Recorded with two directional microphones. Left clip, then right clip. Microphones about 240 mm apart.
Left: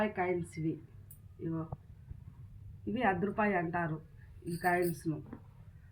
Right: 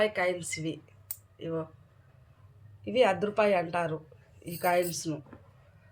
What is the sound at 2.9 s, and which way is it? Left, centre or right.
Speech, right.